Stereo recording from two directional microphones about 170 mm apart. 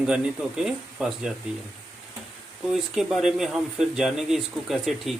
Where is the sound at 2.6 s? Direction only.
Centre (ahead or behind).